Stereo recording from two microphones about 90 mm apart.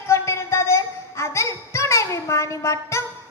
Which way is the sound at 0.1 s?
30° left (ahead or behind).